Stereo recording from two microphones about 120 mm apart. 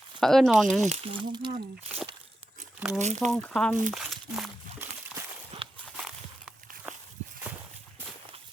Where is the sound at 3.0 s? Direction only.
70° right (ahead or behind).